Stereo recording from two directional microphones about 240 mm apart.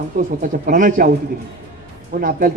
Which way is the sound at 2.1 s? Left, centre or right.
Right.